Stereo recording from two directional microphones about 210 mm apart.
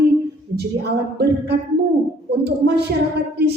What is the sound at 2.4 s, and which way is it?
Speech, 50° right (ahead or behind).